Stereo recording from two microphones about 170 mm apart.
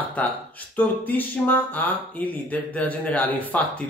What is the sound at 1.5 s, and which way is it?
Speech, 10° left (ahead or behind).